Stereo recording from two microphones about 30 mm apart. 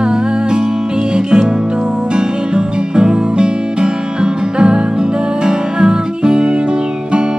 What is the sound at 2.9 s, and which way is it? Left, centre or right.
Music, right.